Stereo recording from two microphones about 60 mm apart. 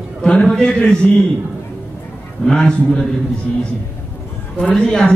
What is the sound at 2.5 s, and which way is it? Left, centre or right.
A man's voice, centre.